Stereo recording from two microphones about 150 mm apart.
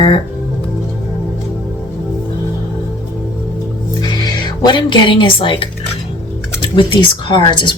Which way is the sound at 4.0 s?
30° left (ahead or behind).